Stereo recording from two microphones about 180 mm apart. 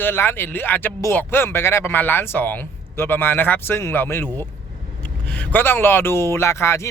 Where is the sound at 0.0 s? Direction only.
10° left (ahead or behind).